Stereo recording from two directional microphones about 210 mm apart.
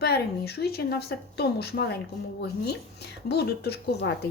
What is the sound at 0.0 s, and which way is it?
Speech, 50° left (ahead or behind).